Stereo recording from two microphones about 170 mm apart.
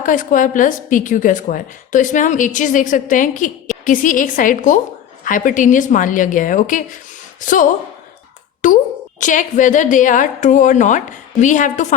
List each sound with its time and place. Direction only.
0.0 s speech: 50° left (ahead or behind)